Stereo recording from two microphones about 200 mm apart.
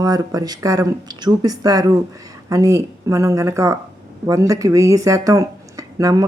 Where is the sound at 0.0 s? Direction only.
20° right (ahead or behind).